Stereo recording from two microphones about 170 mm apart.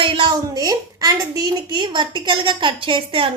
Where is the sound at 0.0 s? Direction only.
30° right (ahead or behind).